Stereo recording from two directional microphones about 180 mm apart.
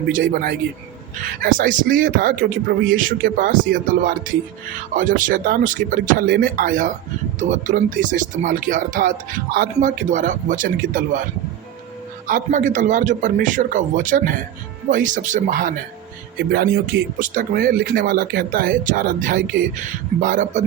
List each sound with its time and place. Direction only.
1.4 s speech: 50° right (ahead or behind)
12.3 s speech: 45° right (ahead or behind)